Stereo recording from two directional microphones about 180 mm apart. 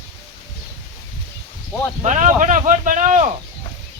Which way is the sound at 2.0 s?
40° right (ahead or behind).